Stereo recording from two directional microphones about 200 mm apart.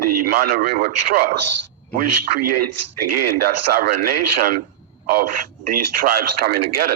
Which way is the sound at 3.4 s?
50° right (ahead or behind).